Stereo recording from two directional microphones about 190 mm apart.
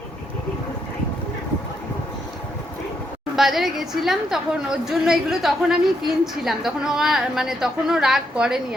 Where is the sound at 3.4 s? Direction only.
Centre (ahead or behind).